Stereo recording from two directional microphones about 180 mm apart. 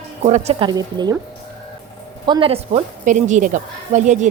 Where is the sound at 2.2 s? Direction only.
30° right (ahead or behind).